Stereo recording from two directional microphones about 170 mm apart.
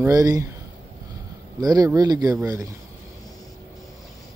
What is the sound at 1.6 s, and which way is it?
Speech, 20° right (ahead or behind).